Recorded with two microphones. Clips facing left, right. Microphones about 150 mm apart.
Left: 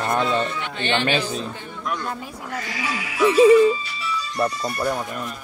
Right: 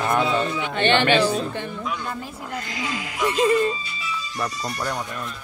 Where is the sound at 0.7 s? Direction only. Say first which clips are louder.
Right 7 dB; 60° right (ahead or behind).